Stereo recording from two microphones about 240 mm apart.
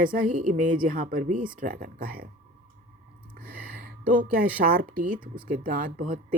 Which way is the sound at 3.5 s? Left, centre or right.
Right.